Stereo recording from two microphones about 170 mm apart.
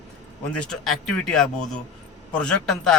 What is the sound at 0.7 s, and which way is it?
A man's voice, 5° left (ahead or behind).